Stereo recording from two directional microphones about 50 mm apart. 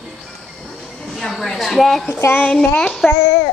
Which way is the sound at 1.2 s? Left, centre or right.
Centre.